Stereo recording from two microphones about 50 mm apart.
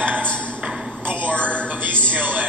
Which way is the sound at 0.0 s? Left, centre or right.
Right.